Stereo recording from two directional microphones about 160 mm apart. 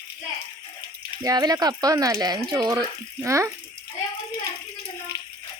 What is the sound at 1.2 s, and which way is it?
Speech, 25° right (ahead or behind).